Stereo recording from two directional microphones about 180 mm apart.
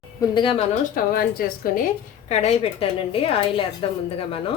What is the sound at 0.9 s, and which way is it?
Speech, 55° left (ahead or behind).